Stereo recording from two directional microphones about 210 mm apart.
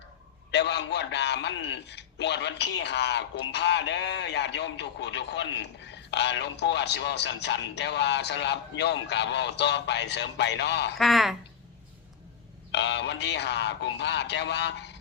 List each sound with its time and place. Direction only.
0.5 s a man's voice: 55° left (ahead or behind)
10.9 s a woman's voice: centre (ahead or behind)
12.7 s a man's voice: 55° left (ahead or behind)